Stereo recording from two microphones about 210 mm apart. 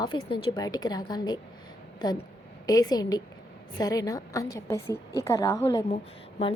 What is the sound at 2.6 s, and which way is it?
A woman's voice, 15° left (ahead or behind).